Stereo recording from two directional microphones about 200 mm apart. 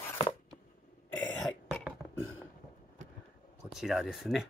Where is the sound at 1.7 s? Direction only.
5° right (ahead or behind).